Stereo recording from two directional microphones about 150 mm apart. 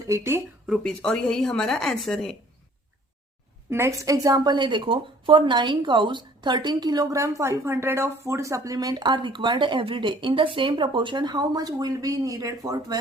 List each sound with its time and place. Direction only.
0.1 s speech: 15° right (ahead or behind)
0.7 s a woman's voice: 5° left (ahead or behind)
3.7 s a woman's voice: 15° right (ahead or behind)